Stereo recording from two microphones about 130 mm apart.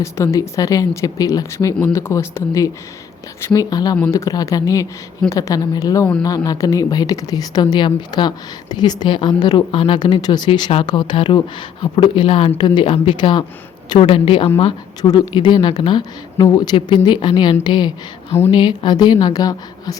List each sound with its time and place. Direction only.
0.0 s a woman's voice: 25° left (ahead or behind); by 14.5 s 45° left (ahead or behind)
15.0 s a woman's voice: 30° left (ahead or behind)